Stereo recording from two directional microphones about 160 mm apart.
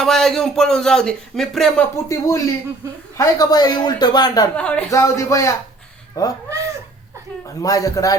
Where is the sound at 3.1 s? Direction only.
20° left (ahead or behind).